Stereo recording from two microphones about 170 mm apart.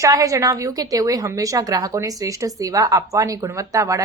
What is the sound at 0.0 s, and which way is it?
A woman's voice, 20° right (ahead or behind).